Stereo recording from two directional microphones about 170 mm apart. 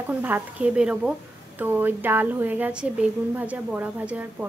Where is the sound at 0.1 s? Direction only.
10° right (ahead or behind).